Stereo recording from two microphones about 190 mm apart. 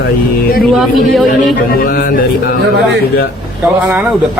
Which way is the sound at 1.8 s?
50° left (ahead or behind).